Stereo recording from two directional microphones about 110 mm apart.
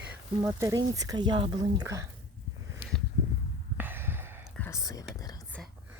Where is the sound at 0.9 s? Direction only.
35° right (ahead or behind).